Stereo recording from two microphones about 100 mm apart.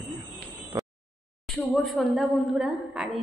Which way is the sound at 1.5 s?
Centre (ahead or behind).